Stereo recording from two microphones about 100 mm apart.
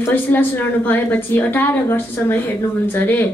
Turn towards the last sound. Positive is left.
turn(degrees=20)  # may be behind; listen again after turning